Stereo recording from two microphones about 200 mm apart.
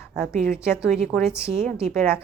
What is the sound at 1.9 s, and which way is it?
Speech, centre (ahead or behind).